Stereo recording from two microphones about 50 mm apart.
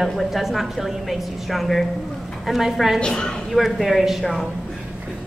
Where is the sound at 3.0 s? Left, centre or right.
Centre.